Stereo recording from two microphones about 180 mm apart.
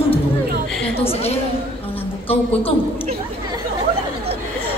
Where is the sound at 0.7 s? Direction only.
5° left (ahead or behind).